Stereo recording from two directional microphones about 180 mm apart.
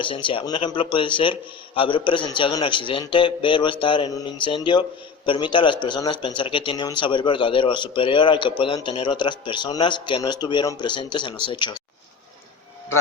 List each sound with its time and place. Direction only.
0.0 s a man's voice: 30° left (ahead or behind)